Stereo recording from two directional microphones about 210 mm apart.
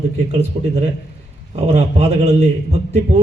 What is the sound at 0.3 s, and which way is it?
A man's voice, 30° right (ahead or behind).